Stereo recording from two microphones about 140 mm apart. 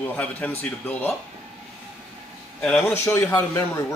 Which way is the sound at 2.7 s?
15° left (ahead or behind).